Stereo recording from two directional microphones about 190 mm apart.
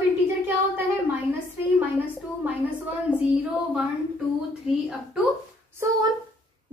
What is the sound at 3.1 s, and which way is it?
Speech, 10° left (ahead or behind).